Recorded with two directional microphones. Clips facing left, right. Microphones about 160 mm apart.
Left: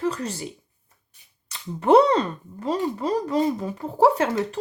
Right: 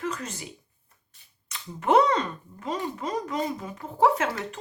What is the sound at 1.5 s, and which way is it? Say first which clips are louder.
Speech: left 5 dB; 35° left (ahead or behind).